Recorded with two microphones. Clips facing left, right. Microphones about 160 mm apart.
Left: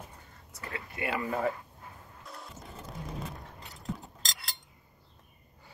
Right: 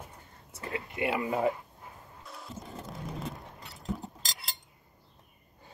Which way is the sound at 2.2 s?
Centre (ahead or behind).